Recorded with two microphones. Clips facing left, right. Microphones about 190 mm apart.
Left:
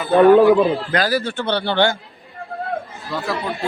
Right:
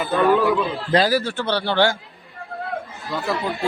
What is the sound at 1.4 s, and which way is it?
Speech, 25° left (ahead or behind).